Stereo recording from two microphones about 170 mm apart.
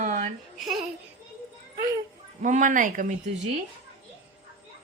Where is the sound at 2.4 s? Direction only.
50° right (ahead or behind).